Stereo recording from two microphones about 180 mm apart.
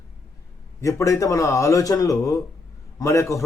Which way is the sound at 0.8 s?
15° left (ahead or behind).